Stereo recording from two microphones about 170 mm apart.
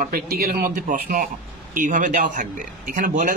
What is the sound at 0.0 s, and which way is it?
A man's voice, 60° right (ahead or behind).